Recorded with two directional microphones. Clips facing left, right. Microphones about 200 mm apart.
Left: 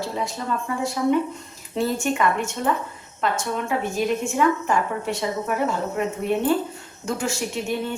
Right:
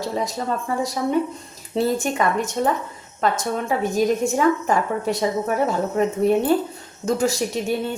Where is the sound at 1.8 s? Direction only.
35° right (ahead or behind).